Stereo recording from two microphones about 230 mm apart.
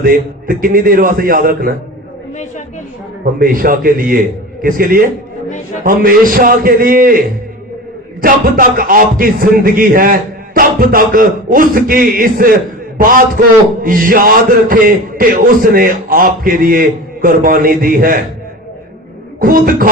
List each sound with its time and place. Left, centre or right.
0.0 s a man's voice: right
3.3 s a man's voice: right
8.2 s a man's voice: right
19.4 s a man's voice: right